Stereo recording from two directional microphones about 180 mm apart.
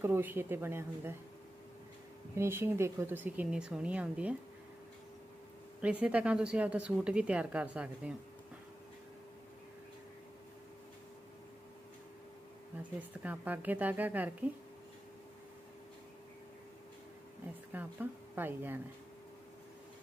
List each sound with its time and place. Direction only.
0.0 s a woman's voice: 10° right (ahead or behind)
2.3 s a woman's voice: 15° right (ahead or behind)
5.8 s a woman's voice: 5° right (ahead or behind)
13.0 s a woman's voice: 10° right (ahead or behind)
17.7 s a woman's voice: 10° right (ahead or behind)